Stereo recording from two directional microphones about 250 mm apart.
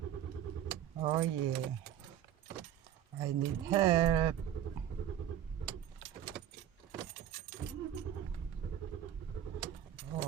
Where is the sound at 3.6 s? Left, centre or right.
Centre.